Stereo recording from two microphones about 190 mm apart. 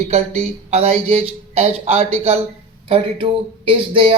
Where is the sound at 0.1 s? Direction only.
35° right (ahead or behind).